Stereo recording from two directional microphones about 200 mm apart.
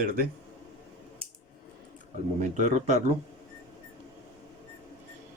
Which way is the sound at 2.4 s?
35° right (ahead or behind).